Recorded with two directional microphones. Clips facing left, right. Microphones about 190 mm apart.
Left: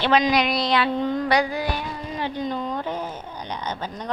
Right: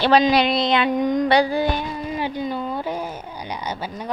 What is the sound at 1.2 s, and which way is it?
Speech, 30° right (ahead or behind).